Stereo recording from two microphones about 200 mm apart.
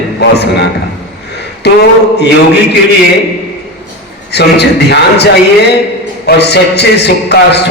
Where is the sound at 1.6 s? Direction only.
55° left (ahead or behind).